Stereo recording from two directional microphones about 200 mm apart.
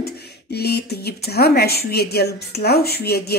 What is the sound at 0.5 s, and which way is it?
Speech, 55° left (ahead or behind).